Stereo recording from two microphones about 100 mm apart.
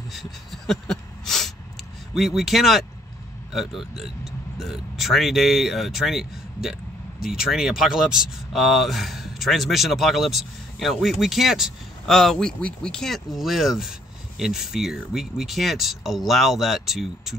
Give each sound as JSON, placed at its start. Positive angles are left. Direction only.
{"t": 0.1, "sound": "speech", "side_deg": 0}
{"t": 3.9, "sound": "speech", "side_deg": -5}